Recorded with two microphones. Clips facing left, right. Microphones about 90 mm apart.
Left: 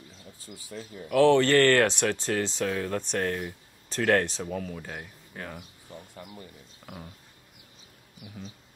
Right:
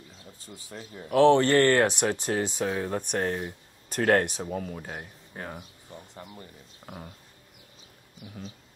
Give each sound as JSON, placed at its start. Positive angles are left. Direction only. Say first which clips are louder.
{"t": 0.5, "sound": "speech", "louder": "left 2 dB", "side_deg": -30}
{"t": 1.1, "sound": "speech", "louder": "right 1 dB", "side_deg": -20}